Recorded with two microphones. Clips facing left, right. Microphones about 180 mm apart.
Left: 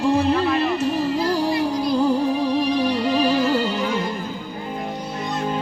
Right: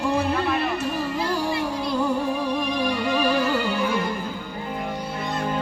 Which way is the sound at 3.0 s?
25° left (ahead or behind).